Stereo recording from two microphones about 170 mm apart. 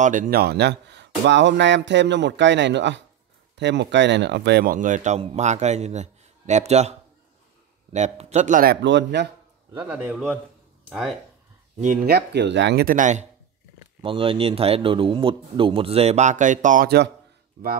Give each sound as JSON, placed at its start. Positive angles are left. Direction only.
{"t": 0.0, "sound": "speech", "side_deg": -50}
{"t": 4.7, "sound": "speech", "side_deg": -50}
{"t": 8.8, "sound": "speech", "side_deg": -90}
{"t": 9.8, "sound": "a man's voice", "side_deg": -10}
{"t": 11.8, "sound": "speech", "side_deg": -55}
{"t": 14.0, "sound": "speech", "side_deg": -30}